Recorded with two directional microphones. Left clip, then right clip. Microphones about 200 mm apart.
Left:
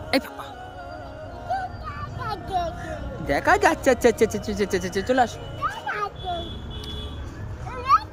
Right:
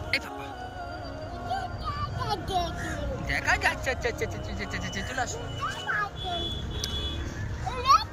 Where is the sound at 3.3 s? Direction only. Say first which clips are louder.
Left 7 dB; 30° left (ahead or behind).